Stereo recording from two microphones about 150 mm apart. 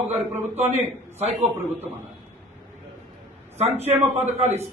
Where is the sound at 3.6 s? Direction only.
45° right (ahead or behind).